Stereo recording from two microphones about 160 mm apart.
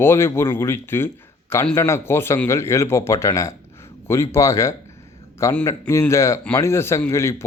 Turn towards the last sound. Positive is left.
turn(degrees=15)  # may be behind; listen again after turning